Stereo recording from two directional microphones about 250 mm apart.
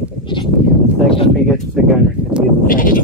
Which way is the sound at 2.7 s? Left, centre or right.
Left.